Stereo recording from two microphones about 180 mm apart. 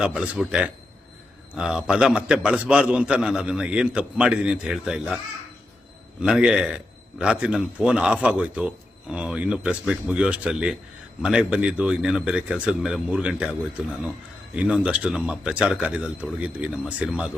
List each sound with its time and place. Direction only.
0.0 s speech: 5° right (ahead or behind)
6.2 s speech: 5° right (ahead or behind)
14.5 s speech: 5° right (ahead or behind)